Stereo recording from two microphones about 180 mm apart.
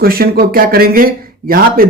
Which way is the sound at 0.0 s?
55° right (ahead or behind).